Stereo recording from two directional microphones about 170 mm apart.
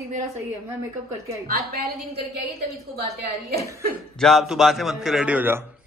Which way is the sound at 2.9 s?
70° right (ahead or behind).